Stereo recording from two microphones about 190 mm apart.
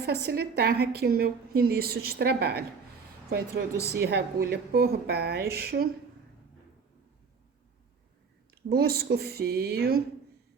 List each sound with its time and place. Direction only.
0.0 s a woman's voice: 55° right (ahead or behind)
8.7 s a woman's voice: 55° right (ahead or behind)